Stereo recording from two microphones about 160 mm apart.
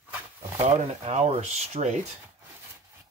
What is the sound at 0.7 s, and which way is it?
Speech, 40° right (ahead or behind).